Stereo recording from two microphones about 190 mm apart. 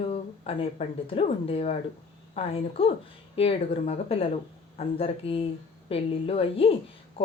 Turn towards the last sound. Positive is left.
turn(degrees=30)  # may be behind; listen again after turning